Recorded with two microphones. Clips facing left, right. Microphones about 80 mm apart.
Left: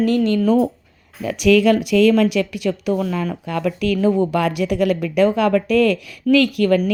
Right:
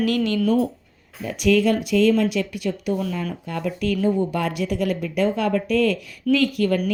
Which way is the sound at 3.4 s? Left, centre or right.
Left.